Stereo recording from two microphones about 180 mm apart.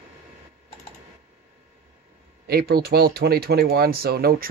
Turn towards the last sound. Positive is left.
turn(degrees=-60)  # may be behind; listen again after turning